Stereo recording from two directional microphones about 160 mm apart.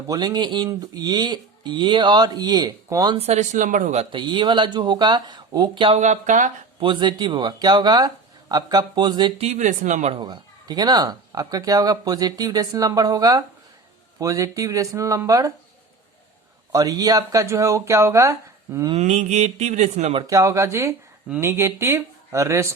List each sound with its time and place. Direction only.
0.1 s speech: 25° right (ahead or behind)
3.2 s speech: 45° right (ahead or behind)
4.1 s speech: 30° right (ahead or behind)
6.0 s speech: 50° right (ahead or behind)
6.7 s speech: 30° right (ahead or behind)
9.5 s speech: 50° right (ahead or behind)
10.2 s speech: 25° right (ahead or behind)
16.7 s speech: 25° right (ahead or behind)
18.9 s speech: 45° right (ahead or behind)
20.2 s speech: 20° right (ahead or behind)